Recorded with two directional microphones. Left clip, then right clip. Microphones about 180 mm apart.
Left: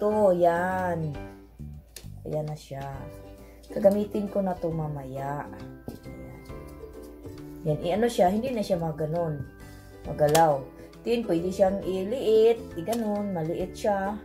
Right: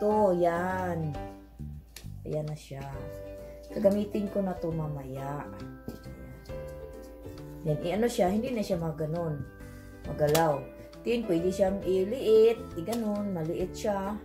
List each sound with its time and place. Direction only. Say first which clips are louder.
0.0 s speech: left 3 dB; 5° left (ahead or behind)
2.2 s speech: left 3 dB; centre (ahead or behind)
7.6 s speech: left 3 dB; centre (ahead or behind)